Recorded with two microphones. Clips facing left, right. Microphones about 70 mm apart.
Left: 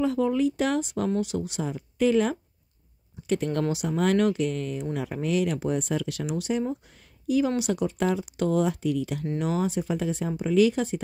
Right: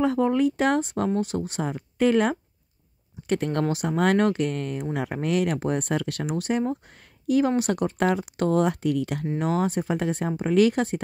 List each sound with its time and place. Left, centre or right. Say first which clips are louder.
0.0 s speech: right 2 dB; right
9.4 s speech: right 2 dB; right